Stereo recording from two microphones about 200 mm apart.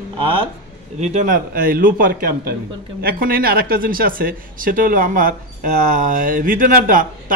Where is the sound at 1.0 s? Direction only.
40° right (ahead or behind).